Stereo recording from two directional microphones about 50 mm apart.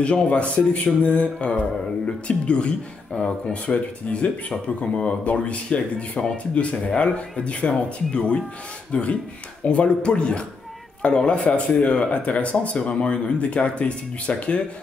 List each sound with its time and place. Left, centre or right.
0.0 s speech: left